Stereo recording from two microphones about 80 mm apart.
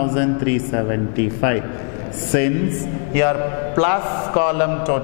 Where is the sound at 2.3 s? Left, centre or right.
Centre.